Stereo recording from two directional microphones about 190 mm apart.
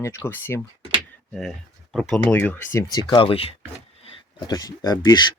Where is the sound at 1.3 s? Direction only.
Centre (ahead or behind).